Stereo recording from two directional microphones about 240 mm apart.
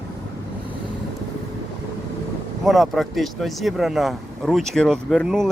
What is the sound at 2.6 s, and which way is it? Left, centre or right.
Speech, centre.